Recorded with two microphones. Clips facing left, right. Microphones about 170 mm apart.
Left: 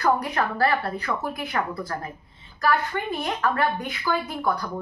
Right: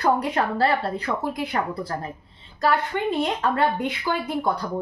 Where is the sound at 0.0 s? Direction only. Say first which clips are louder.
Right 1 dB; 25° right (ahead or behind).